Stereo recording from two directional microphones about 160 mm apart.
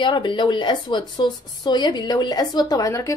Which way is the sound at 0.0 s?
30° left (ahead or behind).